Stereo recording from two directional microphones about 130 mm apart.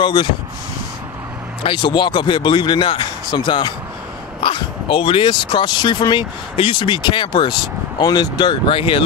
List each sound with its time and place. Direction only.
0.0 s speech: 35° left (ahead or behind)
1.6 s speech: 40° left (ahead or behind)